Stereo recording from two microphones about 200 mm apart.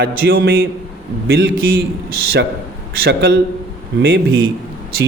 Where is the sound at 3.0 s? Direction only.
60° right (ahead or behind).